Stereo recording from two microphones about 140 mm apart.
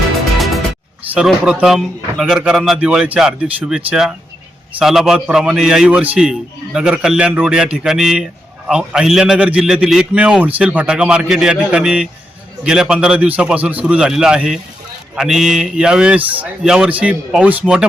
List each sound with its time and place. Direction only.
0.3 s music: centre (ahead or behind)
1.0 s a man's voice: 10° right (ahead or behind)